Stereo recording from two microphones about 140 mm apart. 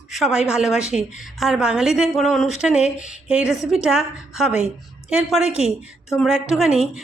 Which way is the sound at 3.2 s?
5° right (ahead or behind).